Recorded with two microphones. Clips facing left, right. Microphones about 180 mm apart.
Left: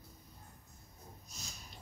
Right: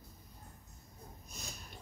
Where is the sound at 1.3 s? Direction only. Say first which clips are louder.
Right 5 dB; 55° right (ahead or behind).